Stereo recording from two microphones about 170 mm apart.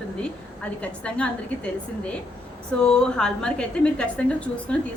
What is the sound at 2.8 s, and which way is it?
A woman's voice, 5° left (ahead or behind).